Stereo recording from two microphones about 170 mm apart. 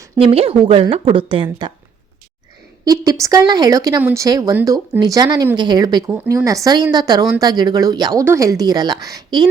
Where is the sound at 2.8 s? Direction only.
20° right (ahead or behind).